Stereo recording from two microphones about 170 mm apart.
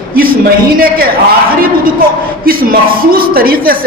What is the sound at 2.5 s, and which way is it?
A man's voice, 60° right (ahead or behind).